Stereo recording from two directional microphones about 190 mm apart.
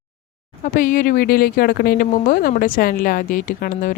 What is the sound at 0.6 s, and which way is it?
Speech, 45° left (ahead or behind).